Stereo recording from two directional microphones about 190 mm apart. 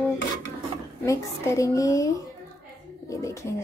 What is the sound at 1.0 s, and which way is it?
A woman's voice, 15° left (ahead or behind).